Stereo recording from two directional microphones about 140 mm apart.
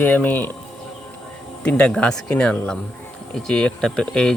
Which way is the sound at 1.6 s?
10° left (ahead or behind).